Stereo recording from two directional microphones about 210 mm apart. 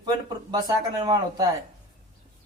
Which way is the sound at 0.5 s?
20° right (ahead or behind).